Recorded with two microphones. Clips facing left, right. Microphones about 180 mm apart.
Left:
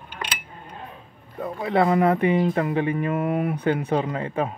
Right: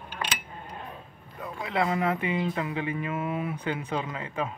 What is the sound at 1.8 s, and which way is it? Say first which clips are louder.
Speech: left 7 dB; 45° left (ahead or behind).